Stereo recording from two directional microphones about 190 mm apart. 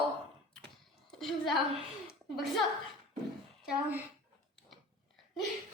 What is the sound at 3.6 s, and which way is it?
Speech, 5° right (ahead or behind).